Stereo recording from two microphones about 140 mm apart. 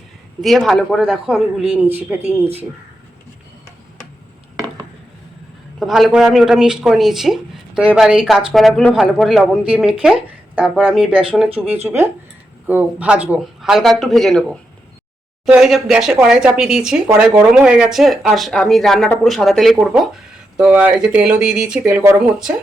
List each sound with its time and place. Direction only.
0.4 s speech: centre (ahead or behind)
5.8 s speech: centre (ahead or behind)